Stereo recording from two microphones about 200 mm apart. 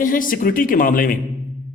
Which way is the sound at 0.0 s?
45° left (ahead or behind).